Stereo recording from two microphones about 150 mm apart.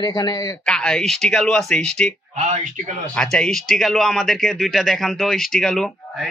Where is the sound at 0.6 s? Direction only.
5° left (ahead or behind).